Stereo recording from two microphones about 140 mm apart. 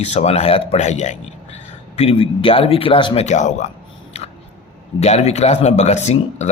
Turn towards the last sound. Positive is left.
turn(degrees=50)  # may be behind; listen again after turning